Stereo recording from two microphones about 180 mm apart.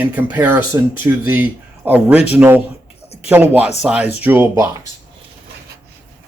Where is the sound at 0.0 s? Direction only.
10° right (ahead or behind).